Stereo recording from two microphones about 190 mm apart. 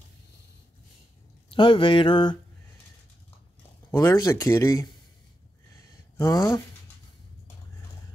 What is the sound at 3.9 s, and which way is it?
Speech, 15° left (ahead or behind).